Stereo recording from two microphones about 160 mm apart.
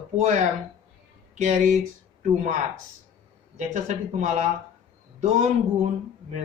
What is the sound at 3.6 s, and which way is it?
Speech, 45° right (ahead or behind).